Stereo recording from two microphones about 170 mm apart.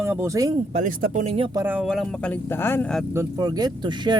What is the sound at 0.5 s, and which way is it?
Speech, 45° right (ahead or behind).